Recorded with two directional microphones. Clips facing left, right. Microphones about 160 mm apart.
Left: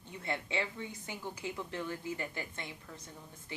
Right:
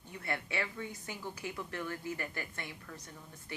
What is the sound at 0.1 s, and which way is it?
A woman's voice, 20° left (ahead or behind).